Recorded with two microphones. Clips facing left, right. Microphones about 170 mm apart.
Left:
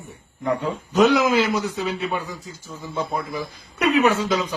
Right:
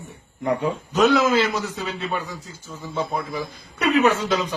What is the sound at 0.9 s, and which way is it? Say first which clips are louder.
A man's voice: left 1 dB; 10° left (ahead or behind).